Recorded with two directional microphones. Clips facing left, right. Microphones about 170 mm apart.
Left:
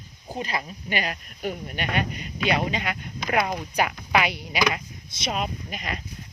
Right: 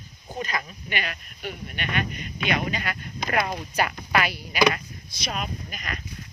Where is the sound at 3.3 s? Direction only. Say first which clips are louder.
Left 2 dB; 15° left (ahead or behind).